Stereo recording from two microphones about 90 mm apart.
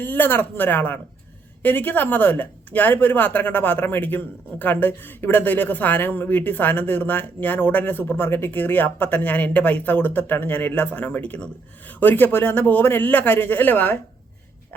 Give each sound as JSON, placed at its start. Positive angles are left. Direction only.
{"t": 0.0, "sound": "speech", "side_deg": 20}